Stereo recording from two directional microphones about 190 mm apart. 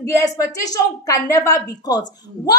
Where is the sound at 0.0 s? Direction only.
15° left (ahead or behind).